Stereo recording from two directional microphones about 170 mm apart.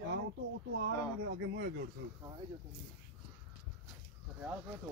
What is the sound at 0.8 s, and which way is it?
Speech, 80° right.